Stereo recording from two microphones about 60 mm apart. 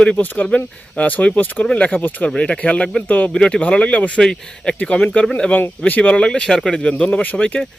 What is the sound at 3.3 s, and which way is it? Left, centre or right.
Speech, centre.